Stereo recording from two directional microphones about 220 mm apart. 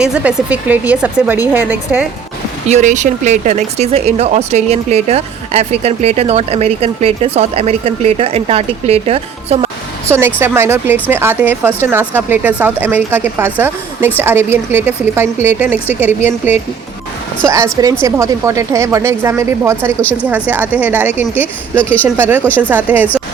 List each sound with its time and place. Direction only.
0.0 s speech: 5° right (ahead or behind)
2.6 s speech: 30° right (ahead or behind)
10.1 s speech: 10° right (ahead or behind)
21.3 s speech: 10° left (ahead or behind)
22.7 s speech: 10° right (ahead or behind)